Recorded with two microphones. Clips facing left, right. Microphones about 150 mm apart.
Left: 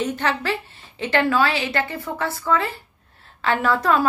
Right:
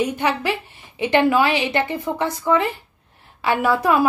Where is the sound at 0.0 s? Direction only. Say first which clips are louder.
Right 3 dB; 10° right (ahead or behind).